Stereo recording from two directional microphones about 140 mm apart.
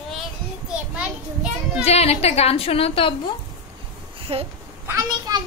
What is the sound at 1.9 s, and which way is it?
A woman's voice, 50° left (ahead or behind).